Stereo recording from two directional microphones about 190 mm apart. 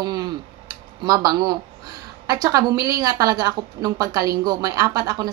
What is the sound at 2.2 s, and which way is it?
A woman's voice, 20° right (ahead or behind).